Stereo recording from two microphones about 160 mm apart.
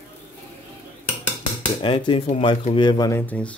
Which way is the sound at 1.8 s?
35° left (ahead or behind).